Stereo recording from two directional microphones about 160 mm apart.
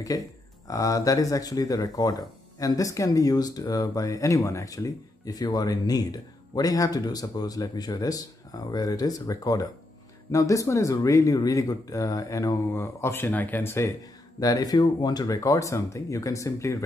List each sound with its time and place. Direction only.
0.1 s speech: 20° left (ahead or behind)